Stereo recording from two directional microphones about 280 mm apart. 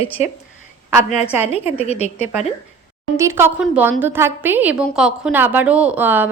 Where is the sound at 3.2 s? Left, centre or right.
Centre.